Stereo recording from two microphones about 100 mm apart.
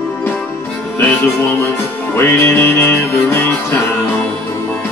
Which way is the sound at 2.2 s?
25° left (ahead or behind).